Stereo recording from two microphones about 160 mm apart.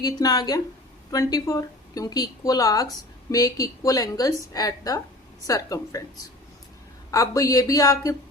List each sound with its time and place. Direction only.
0.0 s a woman's voice: 25° left (ahead or behind)
7.1 s a woman's voice: 20° left (ahead or behind)